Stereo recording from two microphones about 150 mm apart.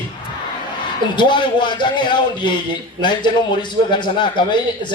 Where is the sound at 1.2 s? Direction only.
30° left (ahead or behind).